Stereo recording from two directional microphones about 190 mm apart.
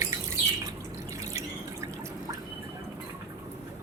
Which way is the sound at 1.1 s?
15° right (ahead or behind).